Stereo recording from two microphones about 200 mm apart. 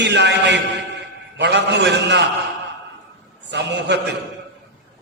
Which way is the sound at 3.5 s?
60° right (ahead or behind).